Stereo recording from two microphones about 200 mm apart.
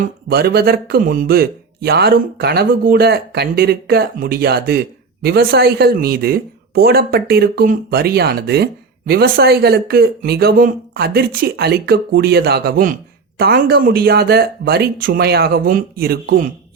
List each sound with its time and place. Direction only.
0.0 s a man's voice: 50° right (ahead or behind)